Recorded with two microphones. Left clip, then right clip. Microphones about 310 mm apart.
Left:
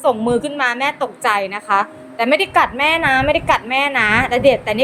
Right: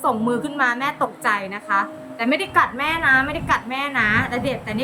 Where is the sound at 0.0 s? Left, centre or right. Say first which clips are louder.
Left 5 dB; centre.